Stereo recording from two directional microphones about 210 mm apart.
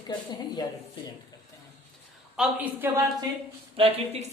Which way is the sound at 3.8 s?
25° right (ahead or behind).